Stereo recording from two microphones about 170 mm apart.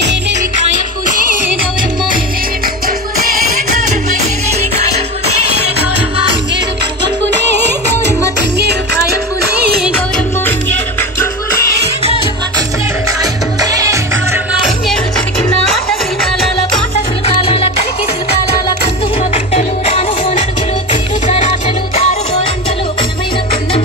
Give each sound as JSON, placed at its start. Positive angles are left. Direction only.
{"t": 1.0, "sound": "music", "side_deg": -55}
{"t": 4.6, "sound": "music", "side_deg": -40}
{"t": 9.4, "sound": "music", "side_deg": -70}
{"t": 13.2, "sound": "music", "side_deg": -20}
{"t": 17.3, "sound": "music", "side_deg": 35}
{"t": 19.3, "sound": "music", "side_deg": 35}